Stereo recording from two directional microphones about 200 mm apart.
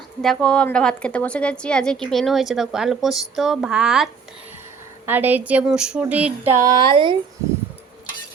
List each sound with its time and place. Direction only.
0.2 s a woman's voice: 5° left (ahead or behind); by 7.2 s 25° right (ahead or behind)